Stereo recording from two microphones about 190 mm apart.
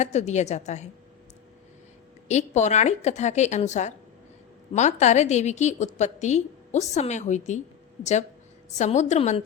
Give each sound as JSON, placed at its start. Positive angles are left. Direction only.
{"t": 0.0, "sound": "a woman's voice", "side_deg": 35}
{"t": 2.2, "sound": "a woman's voice", "side_deg": 35}
{"t": 8.8, "sound": "a woman's voice", "side_deg": 35}